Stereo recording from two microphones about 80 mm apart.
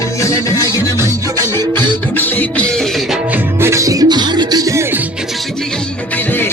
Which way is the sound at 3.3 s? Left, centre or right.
Right.